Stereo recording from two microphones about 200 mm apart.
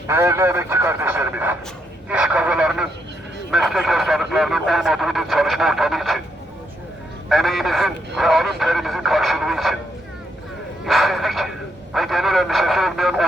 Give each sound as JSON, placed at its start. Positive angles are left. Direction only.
{"t": 0.1, "sound": "speech", "side_deg": -15}
{"t": 7.3, "sound": "speech", "side_deg": 0}
{"t": 10.8, "sound": "speech", "side_deg": 0}